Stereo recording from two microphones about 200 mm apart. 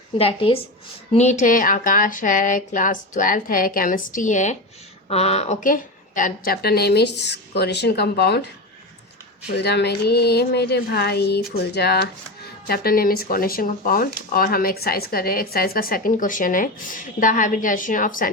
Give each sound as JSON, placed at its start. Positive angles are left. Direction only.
{"t": 0.2, "sound": "speech", "side_deg": 25}
{"t": 9.5, "sound": "a woman's voice", "side_deg": 55}